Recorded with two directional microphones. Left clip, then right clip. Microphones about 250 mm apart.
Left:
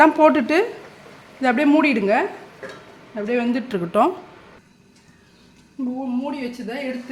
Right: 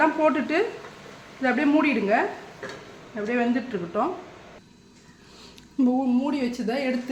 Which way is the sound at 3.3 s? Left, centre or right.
Left.